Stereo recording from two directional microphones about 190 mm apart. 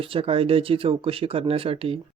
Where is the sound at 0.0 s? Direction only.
30° right (ahead or behind).